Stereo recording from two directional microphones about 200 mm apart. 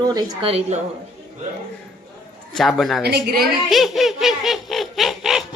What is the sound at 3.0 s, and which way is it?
Speech, 50° right (ahead or behind).